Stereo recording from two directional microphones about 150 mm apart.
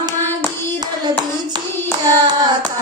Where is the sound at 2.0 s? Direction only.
25° right (ahead or behind).